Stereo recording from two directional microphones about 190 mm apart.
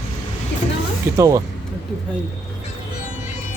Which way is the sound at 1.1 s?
15° right (ahead or behind).